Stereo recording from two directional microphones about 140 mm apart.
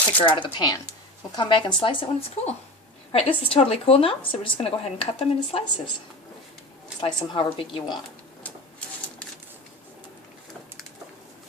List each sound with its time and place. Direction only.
0.3 s a woman's voice: 35° left (ahead or behind)
7.0 s a woman's voice: 40° left (ahead or behind)